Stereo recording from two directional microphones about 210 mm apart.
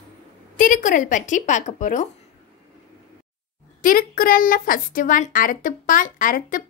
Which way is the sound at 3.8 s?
40° left (ahead or behind).